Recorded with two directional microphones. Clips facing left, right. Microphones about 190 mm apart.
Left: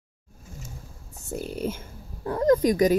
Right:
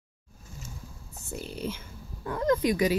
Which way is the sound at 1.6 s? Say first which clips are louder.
Left 5 dB; 45° left (ahead or behind).